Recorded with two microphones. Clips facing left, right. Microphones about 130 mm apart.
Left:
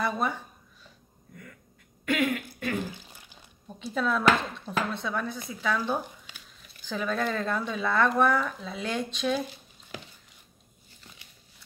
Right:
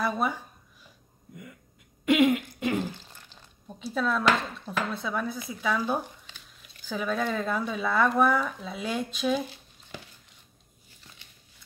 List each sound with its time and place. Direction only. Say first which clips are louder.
0.0 s speech: right 1 dB; centre (ahead or behind)
2.0 s speech: right 6 dB; 20° right (ahead or behind)
2.9 s a sound: even; 10° left (ahead or behind)
3.6 s speech: even; centre (ahead or behind)